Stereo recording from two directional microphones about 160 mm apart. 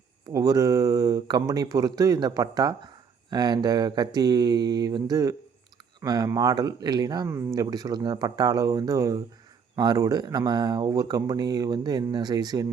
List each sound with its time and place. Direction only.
0.3 s speech: 20° right (ahead or behind)